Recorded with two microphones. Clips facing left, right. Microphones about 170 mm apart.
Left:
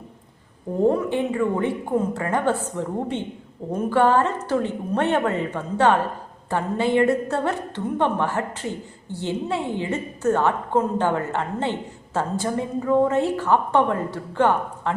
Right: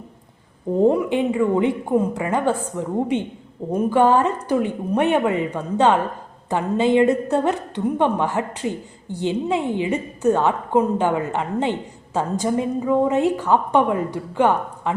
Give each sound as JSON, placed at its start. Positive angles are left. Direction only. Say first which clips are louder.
{"t": 0.8, "sound": "a woman's voice", "louder": "right 3 dB", "side_deg": -15}